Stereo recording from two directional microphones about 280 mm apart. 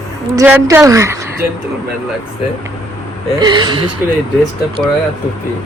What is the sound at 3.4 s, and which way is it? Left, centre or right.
Speech, centre.